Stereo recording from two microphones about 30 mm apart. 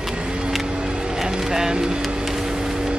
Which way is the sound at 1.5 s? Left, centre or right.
Centre.